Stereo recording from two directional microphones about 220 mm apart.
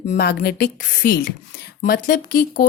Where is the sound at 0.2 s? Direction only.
50° left (ahead or behind).